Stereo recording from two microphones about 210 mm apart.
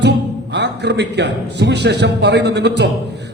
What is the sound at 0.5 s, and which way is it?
A man's voice, 55° right (ahead or behind).